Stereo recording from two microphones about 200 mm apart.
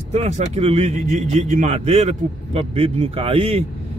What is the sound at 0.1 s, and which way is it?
A man's voice, 35° right (ahead or behind).